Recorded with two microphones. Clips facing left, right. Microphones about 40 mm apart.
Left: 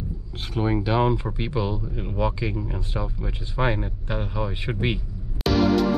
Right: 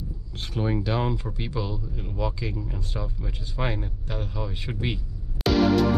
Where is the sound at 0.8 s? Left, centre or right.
Centre.